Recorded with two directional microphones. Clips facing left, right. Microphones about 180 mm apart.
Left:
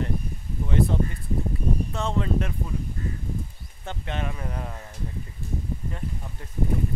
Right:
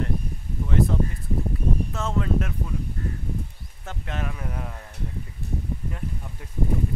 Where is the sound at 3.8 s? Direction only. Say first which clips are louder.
Left 1 dB; centre (ahead or behind).